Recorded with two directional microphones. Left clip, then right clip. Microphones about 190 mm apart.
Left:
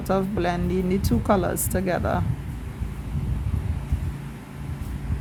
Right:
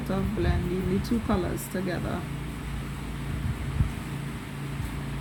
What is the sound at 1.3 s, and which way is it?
Speech, 50° left (ahead or behind).